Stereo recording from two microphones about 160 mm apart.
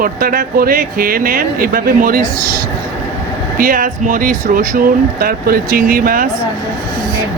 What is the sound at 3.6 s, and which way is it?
Speech, 60° right (ahead or behind).